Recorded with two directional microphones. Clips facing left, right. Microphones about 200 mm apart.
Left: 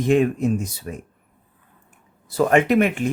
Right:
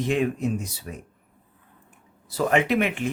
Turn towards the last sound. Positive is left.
turn(degrees=45)  # may be behind; listen again after turning